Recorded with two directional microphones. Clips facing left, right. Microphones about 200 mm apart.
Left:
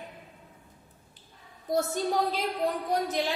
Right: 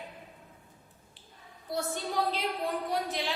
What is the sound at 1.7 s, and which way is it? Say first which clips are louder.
A woman's voice: left 5 dB; 45° left (ahead or behind).